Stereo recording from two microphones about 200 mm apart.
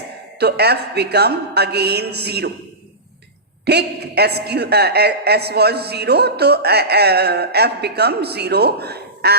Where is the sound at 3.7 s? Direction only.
55° right (ahead or behind).